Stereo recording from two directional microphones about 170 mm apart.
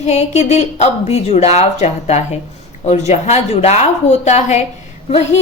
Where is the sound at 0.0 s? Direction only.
40° left (ahead or behind).